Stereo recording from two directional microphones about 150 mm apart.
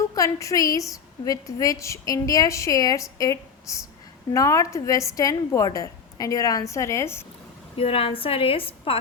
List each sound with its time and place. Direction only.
0.0 s a woman's voice: 20° left (ahead or behind)
7.8 s a woman's voice: 40° left (ahead or behind)